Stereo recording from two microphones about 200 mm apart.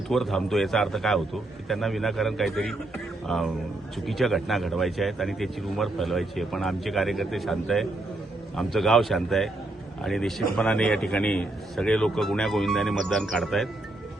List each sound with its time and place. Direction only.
0.1 s speech: centre (ahead or behind)